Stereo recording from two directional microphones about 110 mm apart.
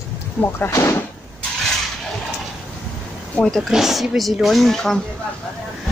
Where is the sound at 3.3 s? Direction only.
5° left (ahead or behind).